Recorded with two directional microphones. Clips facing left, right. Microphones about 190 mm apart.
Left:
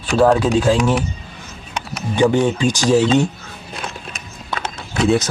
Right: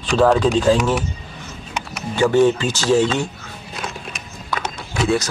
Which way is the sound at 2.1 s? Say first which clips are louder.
Right 1 dB; 15° left (ahead or behind).